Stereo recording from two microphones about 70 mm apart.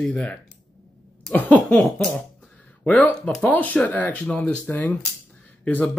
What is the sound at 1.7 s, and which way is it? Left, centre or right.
Speech, centre.